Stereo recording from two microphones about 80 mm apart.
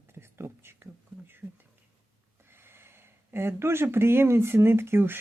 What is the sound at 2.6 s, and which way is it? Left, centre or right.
Speech, right.